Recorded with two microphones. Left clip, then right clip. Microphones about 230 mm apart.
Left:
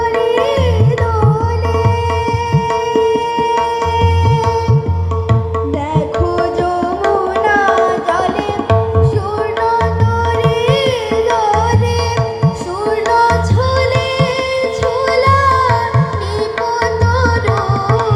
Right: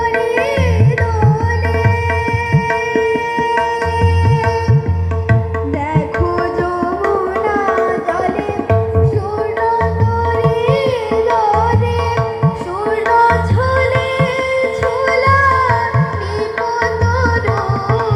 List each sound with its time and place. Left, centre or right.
0.2 s music: right
7.0 s tabla: right
9.6 s music: centre
13.1 s music: centre